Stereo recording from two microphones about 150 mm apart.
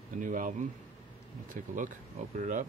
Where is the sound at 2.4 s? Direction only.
55° right (ahead or behind).